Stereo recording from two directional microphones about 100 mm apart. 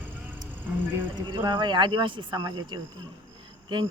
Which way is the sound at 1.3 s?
50° right (ahead or behind).